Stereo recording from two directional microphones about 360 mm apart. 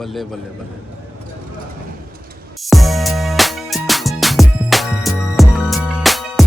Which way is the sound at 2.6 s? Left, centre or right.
Centre.